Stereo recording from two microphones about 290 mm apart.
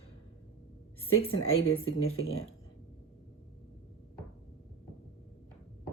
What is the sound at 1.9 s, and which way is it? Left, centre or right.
Speech, left.